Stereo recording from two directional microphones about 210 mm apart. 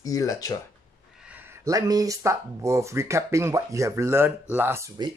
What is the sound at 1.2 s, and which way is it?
Speech, 5° right (ahead or behind).